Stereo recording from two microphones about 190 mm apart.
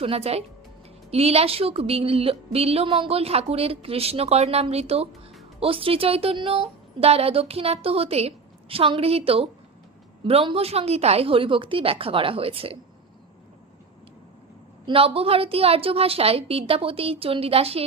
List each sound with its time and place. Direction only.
0.0 s a woman's voice: 30° right (ahead or behind)
14.8 s a woman's voice: 30° right (ahead or behind)